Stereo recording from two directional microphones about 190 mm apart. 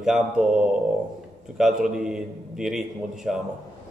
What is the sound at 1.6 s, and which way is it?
Speech, centre (ahead or behind).